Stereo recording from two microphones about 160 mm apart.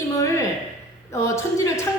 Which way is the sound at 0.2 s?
20° left (ahead or behind).